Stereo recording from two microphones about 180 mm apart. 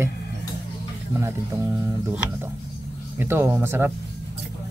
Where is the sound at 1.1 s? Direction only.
15° right (ahead or behind).